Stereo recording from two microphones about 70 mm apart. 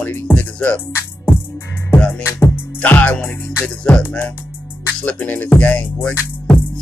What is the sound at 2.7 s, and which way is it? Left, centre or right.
Music, left.